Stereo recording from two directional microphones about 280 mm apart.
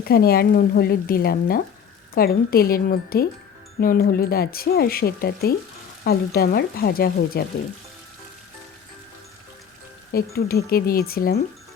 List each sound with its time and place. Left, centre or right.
0.0 s speech: left
10.1 s speech: left